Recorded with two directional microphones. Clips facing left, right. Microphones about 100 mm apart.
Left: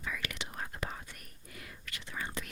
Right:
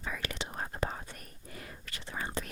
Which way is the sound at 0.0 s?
35° right (ahead or behind).